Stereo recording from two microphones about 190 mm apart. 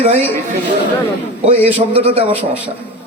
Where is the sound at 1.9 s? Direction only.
30° right (ahead or behind).